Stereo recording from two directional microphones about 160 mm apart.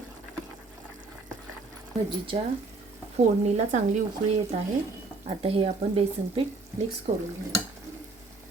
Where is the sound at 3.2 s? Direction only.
50° right (ahead or behind).